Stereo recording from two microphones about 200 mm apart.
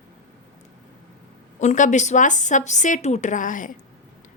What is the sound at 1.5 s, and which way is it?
A woman's voice, 35° left (ahead or behind).